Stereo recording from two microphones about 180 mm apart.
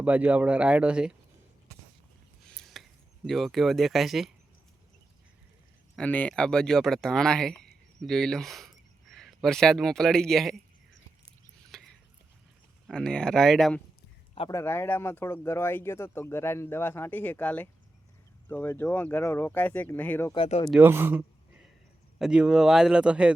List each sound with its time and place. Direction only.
0.0 s speech: 10° right (ahead or behind)
2.8 s a sound: centre (ahead or behind)
3.2 s speech: centre (ahead or behind)
6.0 s speech: 5° left (ahead or behind)
11.7 s a sound: centre (ahead or behind)
12.9 s speech: 5° left (ahead or behind)
14.5 s speech: 15° left (ahead or behind)
20.3 s speech: 30° left (ahead or behind)
20.7 s a man's voice: 10° right (ahead or behind)